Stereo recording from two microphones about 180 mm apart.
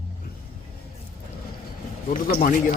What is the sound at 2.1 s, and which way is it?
Speech, 55° left (ahead or behind).